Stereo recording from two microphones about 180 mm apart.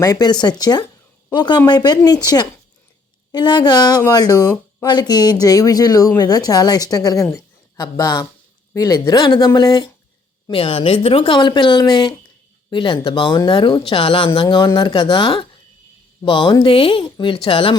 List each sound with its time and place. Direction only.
0.0 s speech: 20° left (ahead or behind)